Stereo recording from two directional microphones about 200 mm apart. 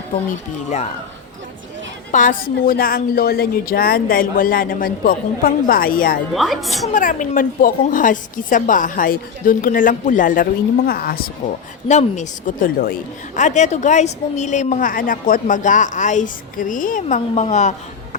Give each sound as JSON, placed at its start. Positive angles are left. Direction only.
{"t": 0.3, "sound": "a woman's voice", "side_deg": 35}
{"t": 2.1, "sound": "a woman's voice", "side_deg": 40}
{"t": 6.3, "sound": "a woman's voice", "side_deg": 0}
{"t": 6.9, "sound": "a woman's voice", "side_deg": 40}
{"t": 11.9, "sound": "a woman's voice", "side_deg": 35}